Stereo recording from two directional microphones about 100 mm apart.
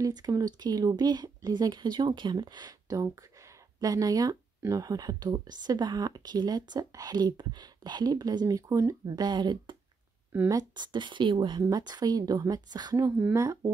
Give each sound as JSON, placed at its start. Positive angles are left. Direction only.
{"t": 0.0, "sound": "speech", "side_deg": -40}
{"t": 11.7, "sound": "speech", "side_deg": -40}